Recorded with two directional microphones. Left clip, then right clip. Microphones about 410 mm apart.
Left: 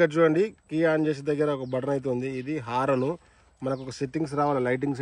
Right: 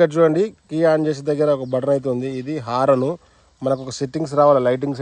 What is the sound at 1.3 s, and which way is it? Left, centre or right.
Speech, centre.